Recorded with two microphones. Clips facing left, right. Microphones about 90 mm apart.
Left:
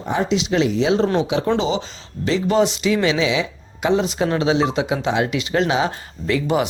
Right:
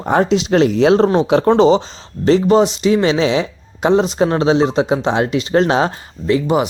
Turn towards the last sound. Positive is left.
turn(degrees=-25)  # may be behind; listen again after turning